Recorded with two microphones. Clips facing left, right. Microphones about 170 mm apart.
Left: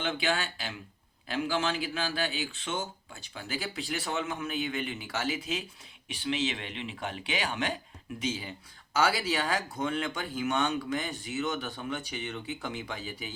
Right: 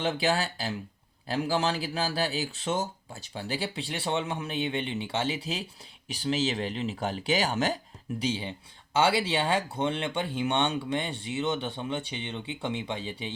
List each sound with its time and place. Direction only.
0.0 s speech: 35° right (ahead or behind)